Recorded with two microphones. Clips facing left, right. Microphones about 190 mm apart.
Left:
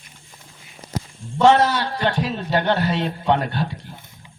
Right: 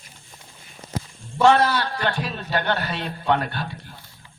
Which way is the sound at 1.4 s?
25° left (ahead or behind).